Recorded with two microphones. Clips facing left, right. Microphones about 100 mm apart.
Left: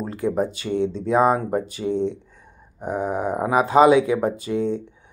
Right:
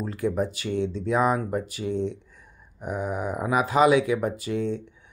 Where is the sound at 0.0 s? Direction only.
30° left (ahead or behind).